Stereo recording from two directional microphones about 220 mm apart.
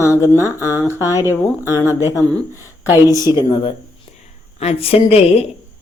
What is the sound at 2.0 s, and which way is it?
Speech, 15° left (ahead or behind).